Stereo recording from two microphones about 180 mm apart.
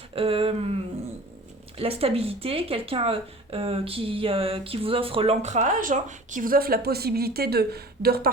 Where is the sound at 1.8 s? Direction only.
35° right (ahead or behind).